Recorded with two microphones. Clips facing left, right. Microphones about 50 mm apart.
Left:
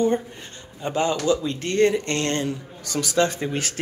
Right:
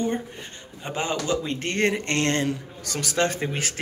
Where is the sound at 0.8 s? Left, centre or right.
Centre.